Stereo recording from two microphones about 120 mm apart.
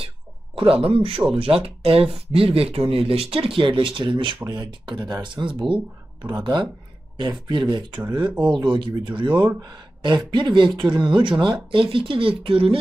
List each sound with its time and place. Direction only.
0.5 s speech: 50° right (ahead or behind)